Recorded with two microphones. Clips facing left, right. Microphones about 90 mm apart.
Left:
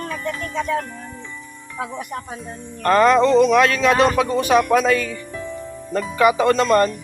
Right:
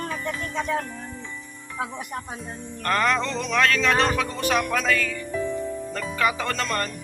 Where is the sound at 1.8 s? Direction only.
15° right (ahead or behind).